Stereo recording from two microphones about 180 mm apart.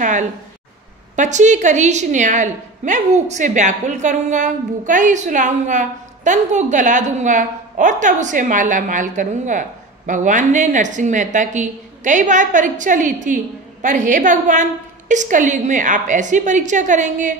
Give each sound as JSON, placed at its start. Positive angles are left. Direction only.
{"t": 0.0, "sound": "a woman's voice", "side_deg": -45}